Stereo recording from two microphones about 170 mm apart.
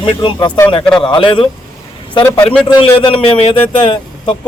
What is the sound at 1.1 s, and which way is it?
Speech, 30° left (ahead or behind).